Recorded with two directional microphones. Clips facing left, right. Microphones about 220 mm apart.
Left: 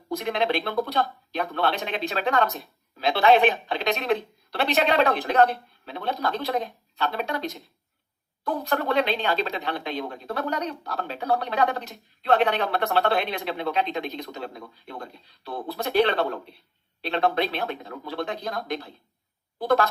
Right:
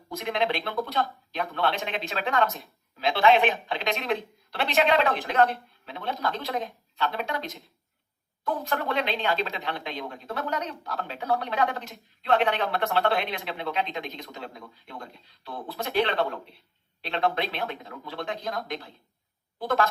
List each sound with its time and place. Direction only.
0.1 s a woman's voice: 35° left (ahead or behind)